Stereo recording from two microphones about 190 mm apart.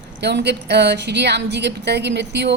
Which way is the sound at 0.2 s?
60° right (ahead or behind).